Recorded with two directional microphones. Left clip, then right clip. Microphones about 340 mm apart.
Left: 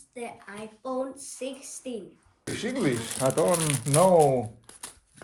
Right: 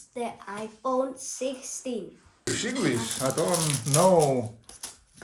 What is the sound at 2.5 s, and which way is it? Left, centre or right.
Speech, centre.